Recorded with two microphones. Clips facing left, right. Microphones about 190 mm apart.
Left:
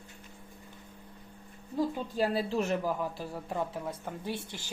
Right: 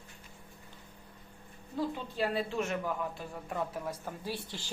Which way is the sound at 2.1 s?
40° left (ahead or behind).